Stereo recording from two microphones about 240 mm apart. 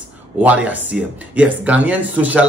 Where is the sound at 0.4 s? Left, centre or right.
Centre.